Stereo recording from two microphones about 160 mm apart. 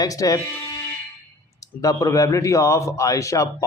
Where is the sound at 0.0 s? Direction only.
20° left (ahead or behind).